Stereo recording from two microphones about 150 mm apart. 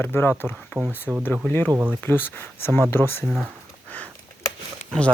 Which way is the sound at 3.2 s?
Centre (ahead or behind).